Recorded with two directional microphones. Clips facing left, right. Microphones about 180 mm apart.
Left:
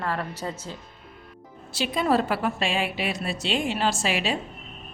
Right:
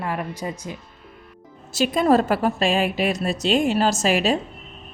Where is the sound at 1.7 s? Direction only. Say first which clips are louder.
Right 6 dB; 45° right (ahead or behind).